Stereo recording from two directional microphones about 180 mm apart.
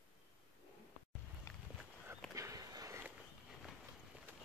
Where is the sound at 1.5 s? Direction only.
15° left (ahead or behind).